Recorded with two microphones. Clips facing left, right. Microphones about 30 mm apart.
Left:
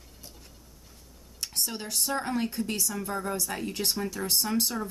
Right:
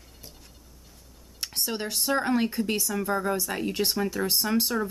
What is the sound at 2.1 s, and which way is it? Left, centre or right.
Speech, right.